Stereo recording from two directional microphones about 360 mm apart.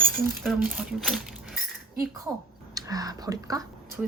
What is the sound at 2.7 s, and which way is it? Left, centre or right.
Speech, centre.